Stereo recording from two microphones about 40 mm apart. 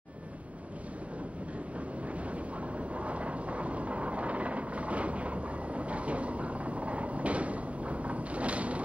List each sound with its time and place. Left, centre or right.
2.9 s train: right